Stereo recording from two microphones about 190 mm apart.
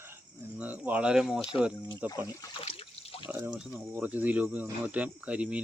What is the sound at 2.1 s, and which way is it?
Speech, 20° left (ahead or behind).